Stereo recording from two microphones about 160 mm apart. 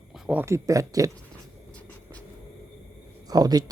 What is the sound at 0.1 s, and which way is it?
Speech, 10° right (ahead or behind).